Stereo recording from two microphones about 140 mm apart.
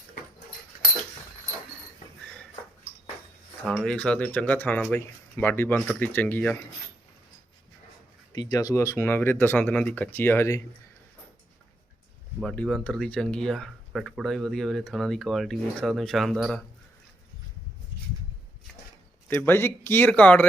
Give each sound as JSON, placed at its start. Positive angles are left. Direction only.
{"t": 3.8, "sound": "speech", "side_deg": 5}
{"t": 8.4, "sound": "speech", "side_deg": 25}
{"t": 12.4, "sound": "speech", "side_deg": 5}
{"t": 18.7, "sound": "a sound", "side_deg": 5}
{"t": 19.3, "sound": "speech", "side_deg": 15}